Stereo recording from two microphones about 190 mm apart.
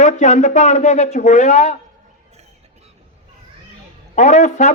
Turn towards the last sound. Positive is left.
turn(degrees=35)  # may be behind; listen again after turning